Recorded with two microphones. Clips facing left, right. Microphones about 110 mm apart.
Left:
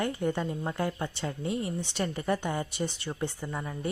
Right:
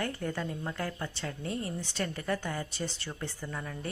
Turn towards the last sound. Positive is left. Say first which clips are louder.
# left 3 dB
turn(degrees=20)  # may be behind; listen again after turning